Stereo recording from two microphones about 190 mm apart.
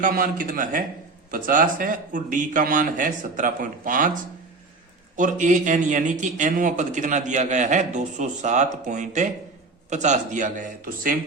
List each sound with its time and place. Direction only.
0.0 s a man's voice: 45° right (ahead or behind)